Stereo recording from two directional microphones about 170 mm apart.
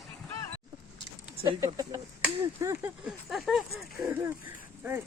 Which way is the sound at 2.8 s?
5° right (ahead or behind).